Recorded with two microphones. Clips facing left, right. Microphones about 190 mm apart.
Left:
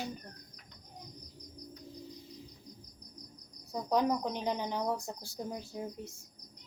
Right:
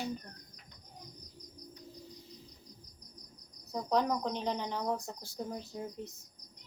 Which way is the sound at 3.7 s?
10° left (ahead or behind).